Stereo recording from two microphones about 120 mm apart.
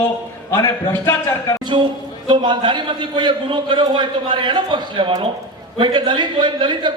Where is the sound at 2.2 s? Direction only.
40° right (ahead or behind).